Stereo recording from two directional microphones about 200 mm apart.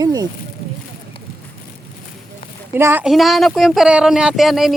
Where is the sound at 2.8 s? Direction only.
10° right (ahead or behind).